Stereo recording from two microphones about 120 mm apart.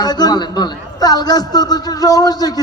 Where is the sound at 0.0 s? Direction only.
35° left (ahead or behind).